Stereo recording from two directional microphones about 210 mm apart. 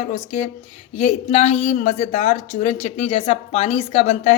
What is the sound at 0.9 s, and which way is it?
Speech, 30° left (ahead or behind).